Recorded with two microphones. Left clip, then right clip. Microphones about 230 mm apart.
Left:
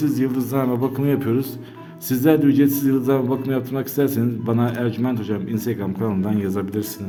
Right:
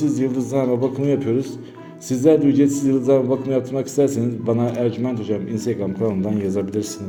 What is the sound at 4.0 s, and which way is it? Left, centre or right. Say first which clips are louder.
A man's voice: right 2 dB; left.